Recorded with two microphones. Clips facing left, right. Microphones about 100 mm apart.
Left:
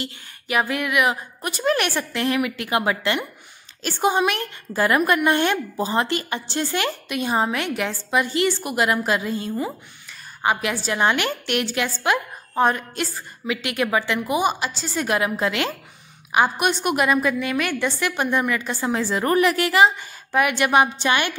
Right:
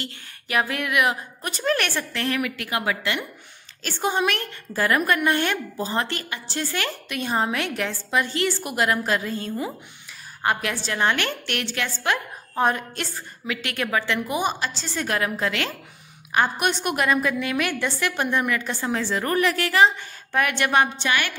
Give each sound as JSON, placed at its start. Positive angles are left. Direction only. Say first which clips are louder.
{"t": 0.0, "sound": "a woman's voice", "louder": "left 3 dB", "side_deg": 5}
{"t": 3.8, "sound": "a woman's voice", "louder": "left 3 dB", "side_deg": 15}
{"t": 12.5, "sound": "a woman's voice", "louder": "left 3 dB", "side_deg": 0}